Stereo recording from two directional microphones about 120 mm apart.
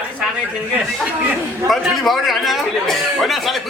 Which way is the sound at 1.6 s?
Centre (ahead or behind).